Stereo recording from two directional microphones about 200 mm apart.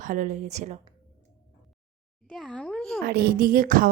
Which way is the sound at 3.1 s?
50° right (ahead or behind).